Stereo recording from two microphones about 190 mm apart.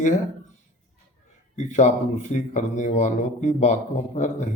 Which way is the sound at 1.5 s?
40° left (ahead or behind).